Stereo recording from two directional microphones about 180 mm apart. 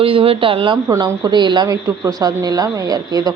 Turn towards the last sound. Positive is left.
turn(degrees=-20)  # may be behind; listen again after turning